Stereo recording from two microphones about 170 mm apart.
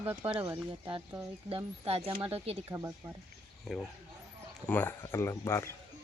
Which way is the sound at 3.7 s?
5° right (ahead or behind).